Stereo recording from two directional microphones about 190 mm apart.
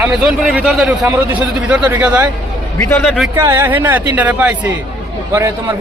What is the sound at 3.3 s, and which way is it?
A man's voice, 10° right (ahead or behind).